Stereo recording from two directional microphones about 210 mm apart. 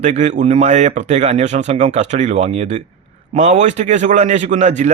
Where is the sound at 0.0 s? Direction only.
35° right (ahead or behind).